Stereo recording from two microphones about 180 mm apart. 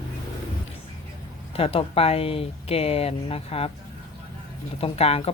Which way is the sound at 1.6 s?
30° left (ahead or behind).